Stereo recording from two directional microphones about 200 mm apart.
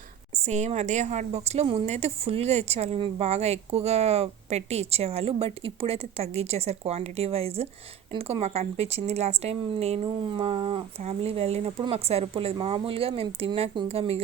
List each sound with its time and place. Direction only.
0.3 s a woman's voice: 35° right (ahead or behind)